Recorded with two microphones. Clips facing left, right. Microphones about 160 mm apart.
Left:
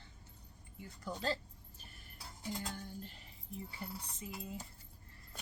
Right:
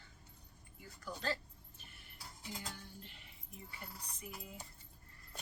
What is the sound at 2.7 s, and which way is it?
Music, 40° left (ahead or behind).